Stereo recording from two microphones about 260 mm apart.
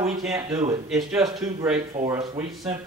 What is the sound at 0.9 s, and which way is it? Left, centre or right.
Speech, centre.